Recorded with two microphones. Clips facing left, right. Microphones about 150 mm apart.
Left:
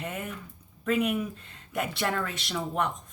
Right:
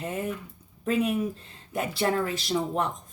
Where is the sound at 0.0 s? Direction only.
30° right (ahead or behind).